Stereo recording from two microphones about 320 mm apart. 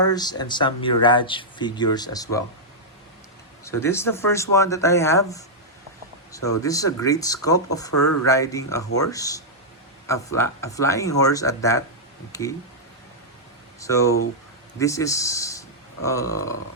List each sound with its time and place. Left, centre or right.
0.1 s speech: centre
3.6 s speech: centre
6.6 s speech: centre
7.9 s speech: left
8.3 s speech: centre
13.7 s speech: centre